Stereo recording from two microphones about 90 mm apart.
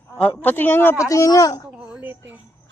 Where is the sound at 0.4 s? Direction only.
20° left (ahead or behind).